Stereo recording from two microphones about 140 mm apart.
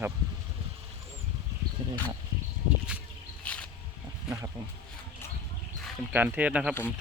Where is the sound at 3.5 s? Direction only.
10° left (ahead or behind).